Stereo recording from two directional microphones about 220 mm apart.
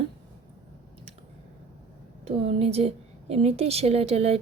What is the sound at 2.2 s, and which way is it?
Speech, 25° right (ahead or behind).